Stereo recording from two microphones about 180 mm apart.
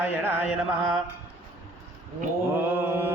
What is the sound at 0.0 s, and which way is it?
Speech, 10° right (ahead or behind).